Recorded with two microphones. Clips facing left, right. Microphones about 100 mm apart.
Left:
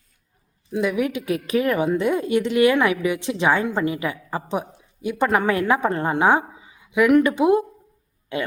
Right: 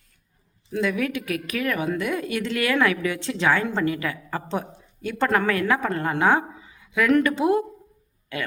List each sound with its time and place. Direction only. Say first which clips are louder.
0.7 s a woman's voice: left 2 dB; 20° left (ahead or behind)